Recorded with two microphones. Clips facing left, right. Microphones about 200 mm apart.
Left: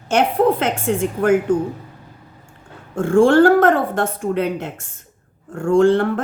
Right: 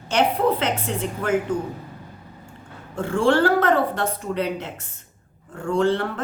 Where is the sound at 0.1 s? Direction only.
50° left (ahead or behind).